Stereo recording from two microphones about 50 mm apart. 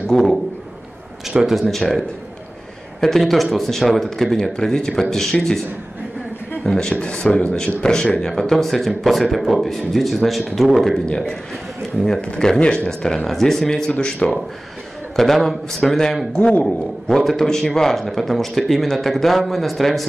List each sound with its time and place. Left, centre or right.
0.1 s a man's voice: centre
6.6 s speech: centre
7.5 s a man's voice: centre
12.2 s speech: centre
15.1 s a man's voice: centre